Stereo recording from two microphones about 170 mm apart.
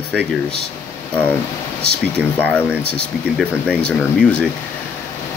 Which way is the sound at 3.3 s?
5° left (ahead or behind).